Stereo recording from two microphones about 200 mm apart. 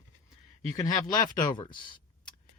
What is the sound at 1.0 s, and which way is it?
Speech, 20° left (ahead or behind).